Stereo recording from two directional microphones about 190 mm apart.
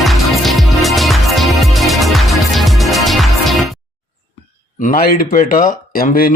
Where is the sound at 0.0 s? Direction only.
Centre (ahead or behind).